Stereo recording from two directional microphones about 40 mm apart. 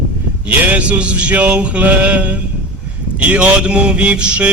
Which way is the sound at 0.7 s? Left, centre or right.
Right.